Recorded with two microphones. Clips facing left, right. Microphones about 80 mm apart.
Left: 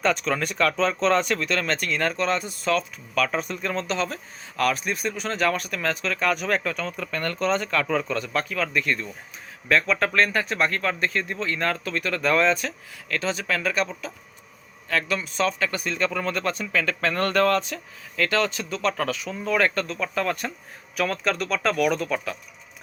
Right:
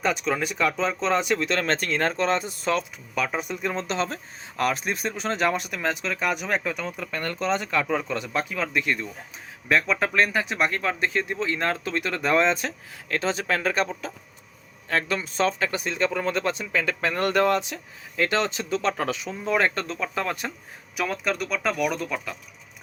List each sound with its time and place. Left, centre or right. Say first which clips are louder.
0.0 s speech: left 1 dB; centre
1.4 s speech: right 1 dB; right; by 22.4 s centre